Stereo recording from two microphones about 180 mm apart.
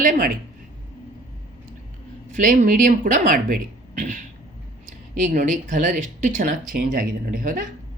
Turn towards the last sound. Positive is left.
turn(degrees=-45)  # may be behind; listen again after turning